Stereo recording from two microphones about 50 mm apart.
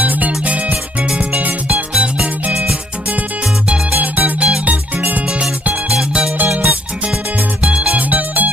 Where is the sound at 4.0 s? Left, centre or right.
Right.